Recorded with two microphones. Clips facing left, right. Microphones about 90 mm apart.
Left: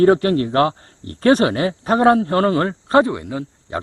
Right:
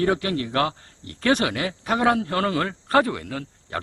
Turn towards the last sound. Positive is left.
turn(degrees=20)  # may be behind; listen again after turning